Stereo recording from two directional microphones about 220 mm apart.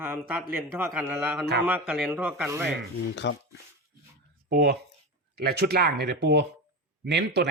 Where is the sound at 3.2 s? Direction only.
50° left (ahead or behind).